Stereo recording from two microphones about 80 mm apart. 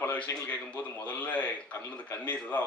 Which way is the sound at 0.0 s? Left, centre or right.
Left.